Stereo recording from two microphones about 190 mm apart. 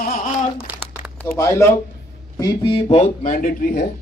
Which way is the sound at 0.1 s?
45° left (ahead or behind).